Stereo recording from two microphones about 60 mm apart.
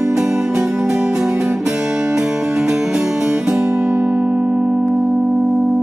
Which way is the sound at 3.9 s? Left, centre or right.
Right.